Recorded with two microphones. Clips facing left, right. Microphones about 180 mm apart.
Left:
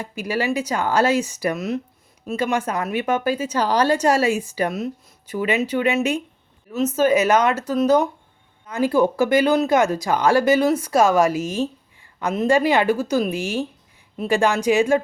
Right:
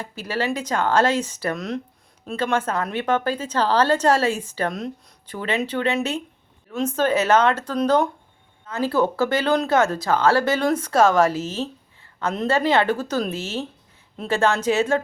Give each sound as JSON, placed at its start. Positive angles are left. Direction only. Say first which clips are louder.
{"t": 0.0, "sound": "a woman's voice", "louder": "left 2 dB", "side_deg": 10}